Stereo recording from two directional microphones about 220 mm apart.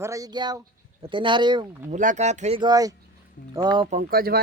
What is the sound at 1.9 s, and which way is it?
Speech, 35° right (ahead or behind).